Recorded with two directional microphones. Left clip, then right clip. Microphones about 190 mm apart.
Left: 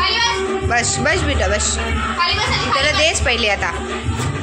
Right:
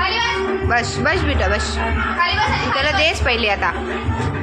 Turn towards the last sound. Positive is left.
turn(degrees=5)  # may be behind; listen again after turning